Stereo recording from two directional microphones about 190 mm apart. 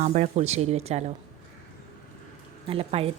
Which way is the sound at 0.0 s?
35° right (ahead or behind).